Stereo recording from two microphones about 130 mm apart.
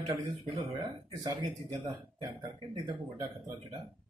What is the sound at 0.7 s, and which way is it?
Speech, 30° right (ahead or behind).